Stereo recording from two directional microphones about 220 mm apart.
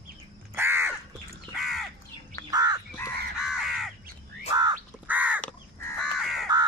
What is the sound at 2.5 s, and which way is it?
Crow, 15° right (ahead or behind).